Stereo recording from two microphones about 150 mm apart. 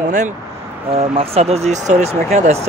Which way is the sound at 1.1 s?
45° right (ahead or behind).